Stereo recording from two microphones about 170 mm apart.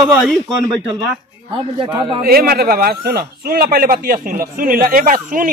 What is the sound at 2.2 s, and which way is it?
Speech, 60° right (ahead or behind).